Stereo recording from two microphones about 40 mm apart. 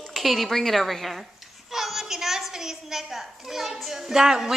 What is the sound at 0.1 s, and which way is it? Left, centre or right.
A woman's voice, centre.